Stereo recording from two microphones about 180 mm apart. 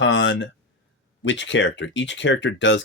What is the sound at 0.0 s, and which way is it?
Speech, 90° left.